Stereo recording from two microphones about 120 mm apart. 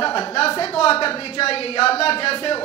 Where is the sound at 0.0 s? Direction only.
50° left (ahead or behind).